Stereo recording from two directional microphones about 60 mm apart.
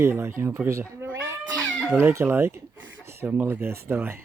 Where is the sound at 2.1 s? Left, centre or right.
Right.